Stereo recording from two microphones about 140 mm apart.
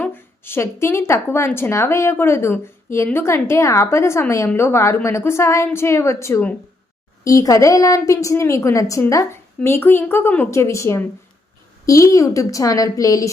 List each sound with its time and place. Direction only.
0.0 s a woman's voice: 15° left (ahead or behind)